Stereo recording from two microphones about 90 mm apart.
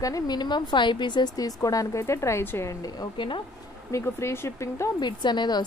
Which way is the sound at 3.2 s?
65° left (ahead or behind).